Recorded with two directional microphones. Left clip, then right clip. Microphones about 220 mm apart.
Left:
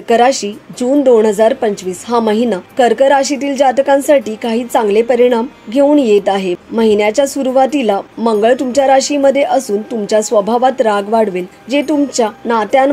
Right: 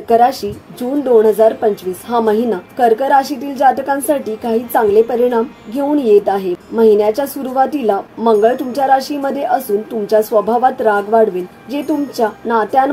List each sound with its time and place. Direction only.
0.1 s a woman's voice: 25° left (ahead or behind)